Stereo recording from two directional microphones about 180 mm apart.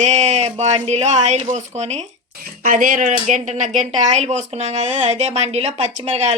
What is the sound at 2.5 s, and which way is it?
Speech, 50° right (ahead or behind).